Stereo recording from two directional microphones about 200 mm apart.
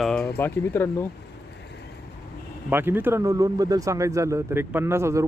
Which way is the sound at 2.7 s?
10° right (ahead or behind).